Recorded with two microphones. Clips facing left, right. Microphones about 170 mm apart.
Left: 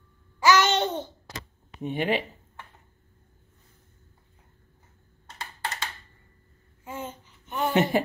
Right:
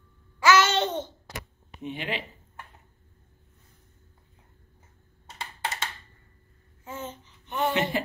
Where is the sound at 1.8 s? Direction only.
45° left (ahead or behind).